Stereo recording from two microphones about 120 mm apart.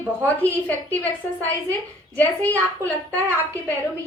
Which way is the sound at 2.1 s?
15° left (ahead or behind).